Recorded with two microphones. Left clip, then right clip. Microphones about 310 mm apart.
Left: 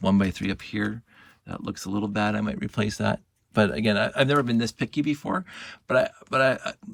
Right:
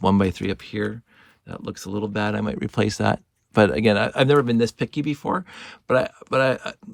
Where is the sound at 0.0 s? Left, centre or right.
Centre.